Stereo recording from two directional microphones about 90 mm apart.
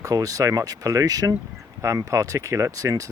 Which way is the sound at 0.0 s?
40° right (ahead or behind).